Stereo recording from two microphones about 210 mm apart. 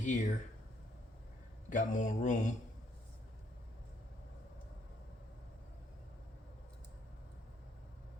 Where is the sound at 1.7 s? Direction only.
35° left (ahead or behind).